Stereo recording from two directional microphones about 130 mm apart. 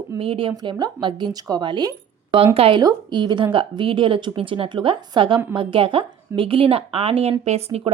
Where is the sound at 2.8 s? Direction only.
35° right (ahead or behind).